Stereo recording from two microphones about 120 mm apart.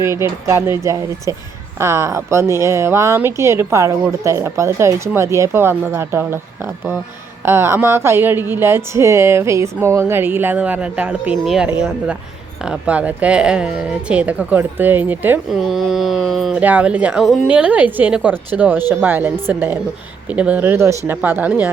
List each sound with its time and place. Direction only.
0.0 s speech: 20° right (ahead or behind)
7.4 s speech: 20° right (ahead or behind)
15.6 s a sound: centre (ahead or behind)
16.6 s speech: 10° right (ahead or behind)